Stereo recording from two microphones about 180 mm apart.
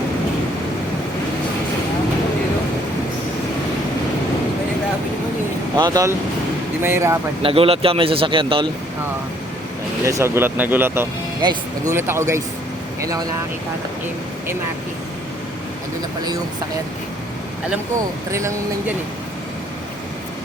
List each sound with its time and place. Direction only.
5.7 s speech: 20° right (ahead or behind)
7.4 s speech: 30° right (ahead or behind)
10.1 s speech: 15° right (ahead or behind)
18.3 s speech: 15° right (ahead or behind)